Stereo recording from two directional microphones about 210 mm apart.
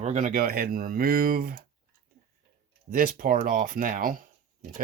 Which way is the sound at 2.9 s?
40° right (ahead or behind).